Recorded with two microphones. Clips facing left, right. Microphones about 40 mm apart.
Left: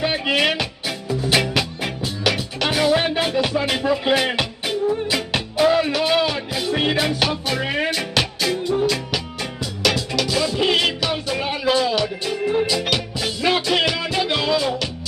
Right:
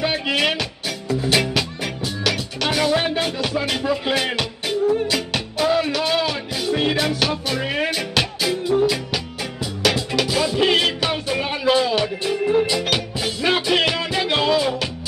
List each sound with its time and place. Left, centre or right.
0.0 s music: centre
6.7 s music: left
7.0 s music: centre
11.0 s music: right
11.3 s music: centre
11.7 s music: right
13.2 s music: centre